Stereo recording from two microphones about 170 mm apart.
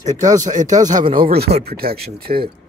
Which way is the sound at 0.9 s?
30° right (ahead or behind).